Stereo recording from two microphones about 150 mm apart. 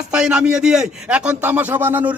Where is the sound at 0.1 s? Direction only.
5° right (ahead or behind).